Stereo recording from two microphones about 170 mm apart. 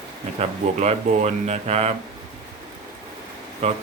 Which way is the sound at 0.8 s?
40° right (ahead or behind).